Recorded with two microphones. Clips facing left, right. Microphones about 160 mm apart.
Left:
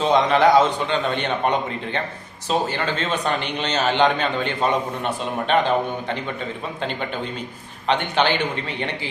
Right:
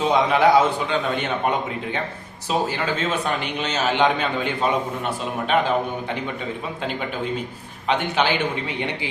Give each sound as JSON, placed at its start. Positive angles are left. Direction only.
{"t": 0.0, "sound": "a man's voice", "side_deg": -10}
{"t": 7.9, "sound": "a man's voice", "side_deg": -10}